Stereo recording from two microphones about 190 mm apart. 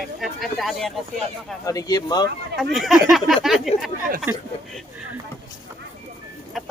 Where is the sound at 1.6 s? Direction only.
20° left (ahead or behind).